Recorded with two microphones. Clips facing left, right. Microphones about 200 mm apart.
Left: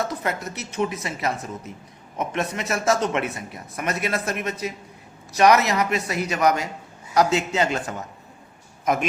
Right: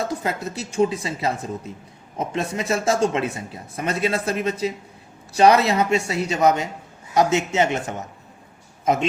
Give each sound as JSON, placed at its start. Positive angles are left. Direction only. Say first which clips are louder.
{"t": 0.0, "sound": "a man's voice", "louder": "right 1 dB", "side_deg": -25}